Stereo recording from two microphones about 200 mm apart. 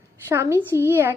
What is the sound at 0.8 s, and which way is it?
Speech, 10° right (ahead or behind).